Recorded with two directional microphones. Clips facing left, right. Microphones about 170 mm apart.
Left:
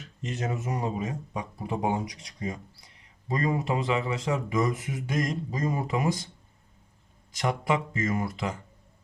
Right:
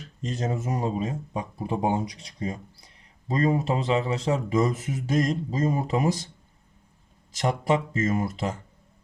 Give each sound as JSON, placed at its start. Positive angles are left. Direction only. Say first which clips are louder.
{"t": 0.0, "sound": "speech", "louder": "right 3 dB", "side_deg": -35}
{"t": 3.2, "sound": "speech", "louder": "right 4 dB", "side_deg": -25}
{"t": 7.7, "sound": "speech", "louder": "right 4 dB", "side_deg": -25}